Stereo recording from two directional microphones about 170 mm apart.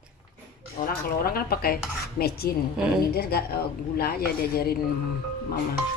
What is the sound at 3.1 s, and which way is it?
A woman's voice, 65° left (ahead or behind).